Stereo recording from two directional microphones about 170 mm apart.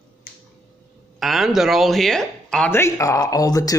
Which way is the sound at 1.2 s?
Centre (ahead or behind).